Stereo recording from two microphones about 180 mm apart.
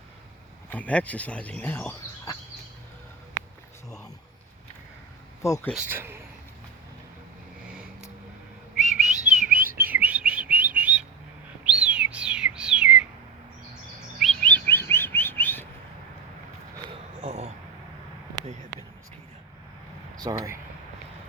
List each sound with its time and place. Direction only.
0.7 s speech: 10° left (ahead or behind)
3.8 s a sound: 20° left (ahead or behind)
5.4 s speech: 15° left (ahead or behind)
5.7 s speech: 10° right (ahead or behind)
9.1 s whistling: 40° right (ahead or behind)
9.7 s chirp: 10° right (ahead or behind)
11.6 s bird: 5° right (ahead or behind)
14.2 s chirp: 5° left (ahead or behind)
17.2 s a sound: 40° right (ahead or behind)
20.1 s a sound: 20° right (ahead or behind)